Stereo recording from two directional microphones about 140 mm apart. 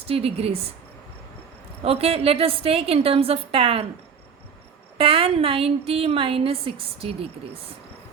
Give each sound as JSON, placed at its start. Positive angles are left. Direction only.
{"t": 0.1, "sound": "a woman's voice", "side_deg": -45}
{"t": 1.8, "sound": "a woman's voice", "side_deg": -45}
{"t": 4.9, "sound": "a woman's voice", "side_deg": -40}